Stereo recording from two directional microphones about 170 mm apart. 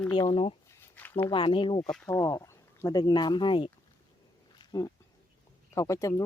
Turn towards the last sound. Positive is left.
turn(degrees=20)  # may be behind; listen again after turning